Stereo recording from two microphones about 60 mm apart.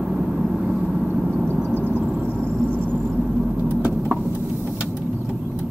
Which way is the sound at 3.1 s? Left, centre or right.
Centre.